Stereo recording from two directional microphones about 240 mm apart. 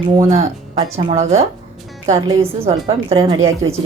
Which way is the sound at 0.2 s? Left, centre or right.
Centre.